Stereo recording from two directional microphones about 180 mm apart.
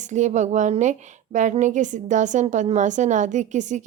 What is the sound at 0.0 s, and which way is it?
A woman's voice, 40° right (ahead or behind).